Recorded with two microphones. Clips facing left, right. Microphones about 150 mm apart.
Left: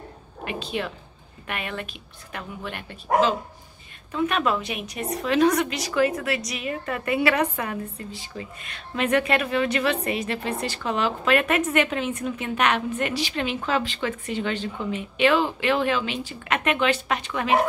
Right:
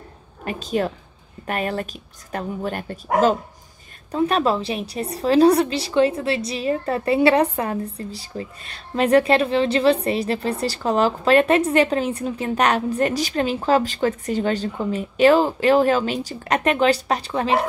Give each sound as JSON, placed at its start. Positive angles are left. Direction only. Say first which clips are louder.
{"t": 0.5, "sound": "a woman's voice", "louder": "right 6 dB", "side_deg": -40}